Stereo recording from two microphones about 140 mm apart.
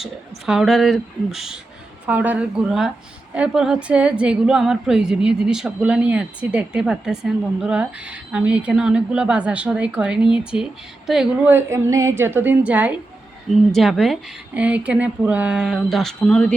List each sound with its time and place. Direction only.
0.0 s a woman's voice: 5° right (ahead or behind)
11.5 s a woman's voice: 20° right (ahead or behind)
13.5 s speech: centre (ahead or behind)